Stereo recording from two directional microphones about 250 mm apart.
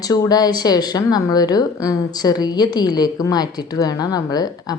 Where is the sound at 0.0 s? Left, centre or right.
Centre.